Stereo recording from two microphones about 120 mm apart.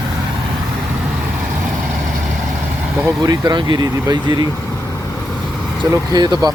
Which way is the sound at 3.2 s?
30° right (ahead or behind).